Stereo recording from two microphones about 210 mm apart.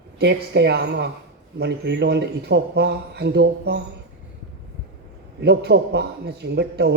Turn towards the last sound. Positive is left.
turn(degrees=-50)  # may be behind; listen again after turning